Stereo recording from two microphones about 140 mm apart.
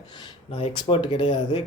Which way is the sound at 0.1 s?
30° left (ahead or behind).